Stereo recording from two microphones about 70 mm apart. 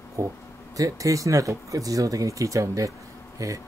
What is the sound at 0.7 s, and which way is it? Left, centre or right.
Speech, right.